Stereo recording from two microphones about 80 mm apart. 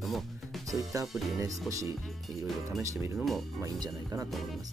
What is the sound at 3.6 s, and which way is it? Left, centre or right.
Speech, right.